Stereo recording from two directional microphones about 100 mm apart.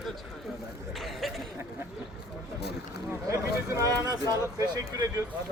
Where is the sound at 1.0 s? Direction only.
Centre (ahead or behind).